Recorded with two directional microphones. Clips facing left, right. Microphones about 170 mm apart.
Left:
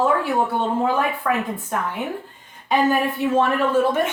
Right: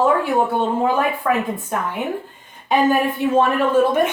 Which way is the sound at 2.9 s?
15° right (ahead or behind).